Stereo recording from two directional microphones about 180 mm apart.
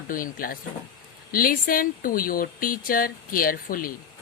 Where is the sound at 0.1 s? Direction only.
50° left (ahead or behind).